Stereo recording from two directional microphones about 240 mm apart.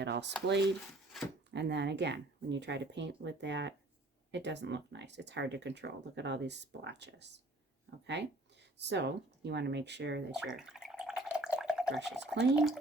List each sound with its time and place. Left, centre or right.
0.0 s speech: right
1.1 s speech: centre
1.5 s speech: right
10.6 s drip: centre
12.0 s speech: centre